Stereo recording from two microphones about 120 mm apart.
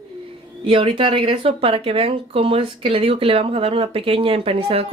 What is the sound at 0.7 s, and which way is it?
Speech, 50° right (ahead or behind).